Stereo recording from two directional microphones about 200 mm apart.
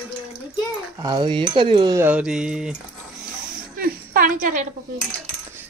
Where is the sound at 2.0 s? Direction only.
5° right (ahead or behind).